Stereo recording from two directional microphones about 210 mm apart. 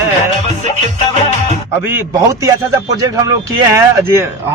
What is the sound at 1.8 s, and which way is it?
Speech, 10° right (ahead or behind).